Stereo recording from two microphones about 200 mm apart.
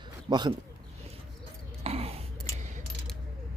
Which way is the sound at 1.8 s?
30° right (ahead or behind).